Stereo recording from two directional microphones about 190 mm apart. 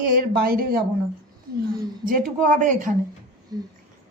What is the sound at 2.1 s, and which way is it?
Speech, 45° right (ahead or behind).